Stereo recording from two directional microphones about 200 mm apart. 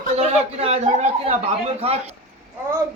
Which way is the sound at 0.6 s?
30° right (ahead or behind).